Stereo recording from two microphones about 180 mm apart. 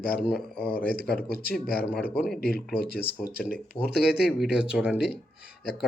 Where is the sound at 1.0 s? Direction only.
60° left (ahead or behind).